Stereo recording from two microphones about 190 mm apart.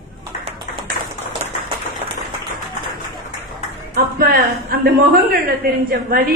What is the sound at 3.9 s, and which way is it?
A woman's voice, 55° right (ahead or behind).